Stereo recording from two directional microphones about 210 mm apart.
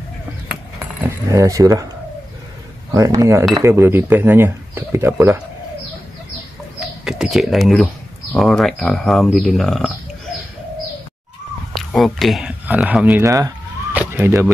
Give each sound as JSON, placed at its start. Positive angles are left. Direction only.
{"t": 1.0, "sound": "speech", "side_deg": -15}
{"t": 2.9, "sound": "speech", "side_deg": -15}
{"t": 6.8, "sound": "speech", "side_deg": 0}
{"t": 11.7, "sound": "speech", "side_deg": 0}